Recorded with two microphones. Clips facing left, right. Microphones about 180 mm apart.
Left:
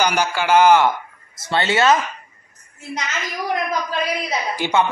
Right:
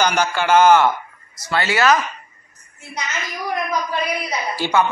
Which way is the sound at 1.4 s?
25° left (ahead or behind).